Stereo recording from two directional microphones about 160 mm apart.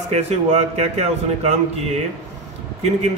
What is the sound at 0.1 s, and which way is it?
A man's voice, 45° right (ahead or behind).